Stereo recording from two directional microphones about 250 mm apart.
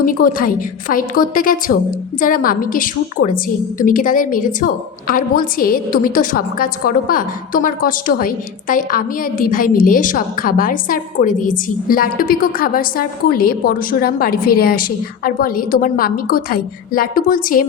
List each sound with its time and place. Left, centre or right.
0.0 s a woman's voice: left